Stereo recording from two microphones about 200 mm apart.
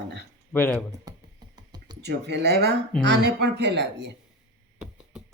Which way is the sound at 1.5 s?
20° right (ahead or behind).